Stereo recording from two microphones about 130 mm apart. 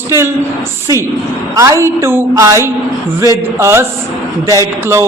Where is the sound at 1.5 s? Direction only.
25° right (ahead or behind).